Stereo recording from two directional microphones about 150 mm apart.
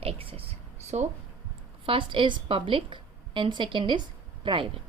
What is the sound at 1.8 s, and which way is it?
A woman's voice, 35° right (ahead or behind).